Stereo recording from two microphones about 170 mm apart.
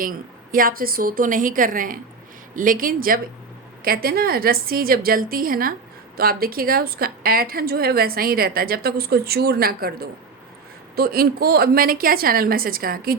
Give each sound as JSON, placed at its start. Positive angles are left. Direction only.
{"t": 0.0, "sound": "a woman's voice", "side_deg": -55}